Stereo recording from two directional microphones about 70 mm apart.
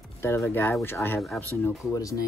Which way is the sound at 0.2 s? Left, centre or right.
Left.